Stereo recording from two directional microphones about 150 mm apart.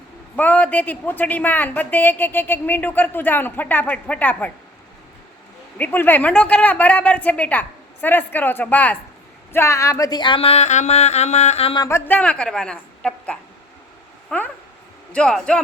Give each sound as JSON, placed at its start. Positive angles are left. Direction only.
{"t": 0.3, "sound": "speech", "side_deg": 10}
{"t": 5.7, "sound": "speech", "side_deg": 15}
{"t": 11.8, "sound": "a man's voice", "side_deg": 20}